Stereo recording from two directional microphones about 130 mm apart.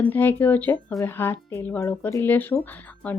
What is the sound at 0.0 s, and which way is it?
Speech, 15° left (ahead or behind).